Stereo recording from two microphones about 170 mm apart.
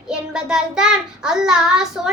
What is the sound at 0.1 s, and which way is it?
Child singing, 5° right (ahead or behind).